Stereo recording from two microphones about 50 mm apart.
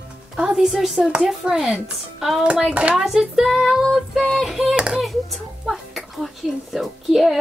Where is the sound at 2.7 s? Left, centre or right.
Right.